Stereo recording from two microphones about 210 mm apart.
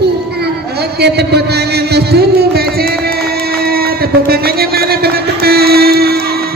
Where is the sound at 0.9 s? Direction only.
50° right (ahead or behind).